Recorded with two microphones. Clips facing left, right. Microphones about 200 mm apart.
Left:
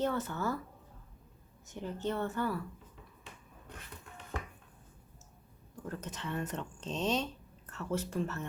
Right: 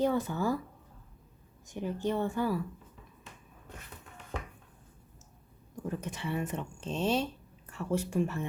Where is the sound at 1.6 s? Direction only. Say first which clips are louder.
Right 4 dB; 15° right (ahead or behind).